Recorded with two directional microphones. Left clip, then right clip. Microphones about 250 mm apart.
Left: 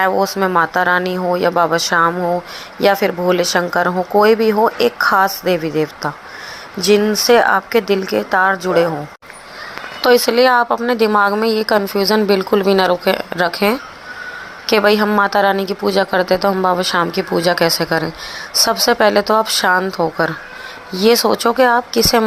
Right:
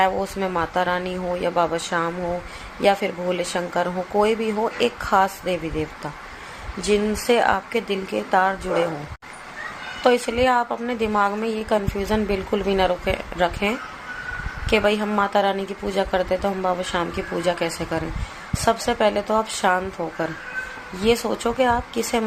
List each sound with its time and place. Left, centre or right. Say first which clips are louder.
0.0 s a woman's voice: left 6 dB; centre
10.2 s a woman's voice: left 8 dB; left